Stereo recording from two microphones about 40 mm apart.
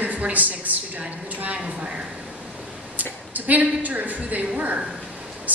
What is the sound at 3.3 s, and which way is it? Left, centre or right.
A woman's voice, right.